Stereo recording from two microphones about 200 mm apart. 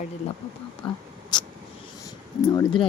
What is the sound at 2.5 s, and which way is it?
Speech, 25° left (ahead or behind).